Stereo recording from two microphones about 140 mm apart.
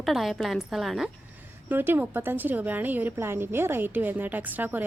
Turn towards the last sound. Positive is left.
turn(degrees=-15)  # may be behind; listen again after turning